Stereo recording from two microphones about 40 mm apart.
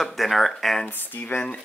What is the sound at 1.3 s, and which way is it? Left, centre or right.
Speech, left.